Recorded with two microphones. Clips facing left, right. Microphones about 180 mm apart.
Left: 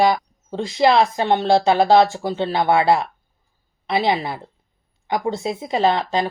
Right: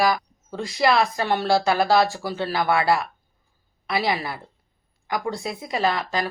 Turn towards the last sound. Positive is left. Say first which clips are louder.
# left 5 dB
turn(degrees=25)  # may be behind; listen again after turning